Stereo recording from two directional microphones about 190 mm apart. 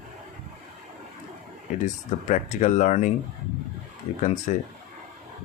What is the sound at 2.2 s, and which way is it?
Speech, 40° left (ahead or behind).